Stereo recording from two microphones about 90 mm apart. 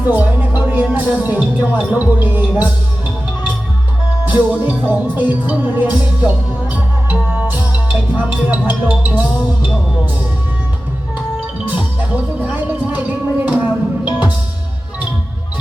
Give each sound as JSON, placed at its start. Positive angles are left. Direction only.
{"t": 0.0, "sound": "music", "side_deg": -20}
{"t": 4.3, "sound": "music", "side_deg": -20}
{"t": 11.7, "sound": "music", "side_deg": -15}